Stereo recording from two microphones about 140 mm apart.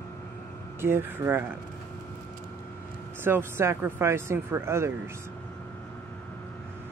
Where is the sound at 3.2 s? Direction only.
15° right (ahead or behind).